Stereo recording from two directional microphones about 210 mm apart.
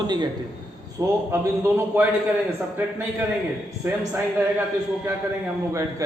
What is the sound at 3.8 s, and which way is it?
Speech, 10° right (ahead or behind).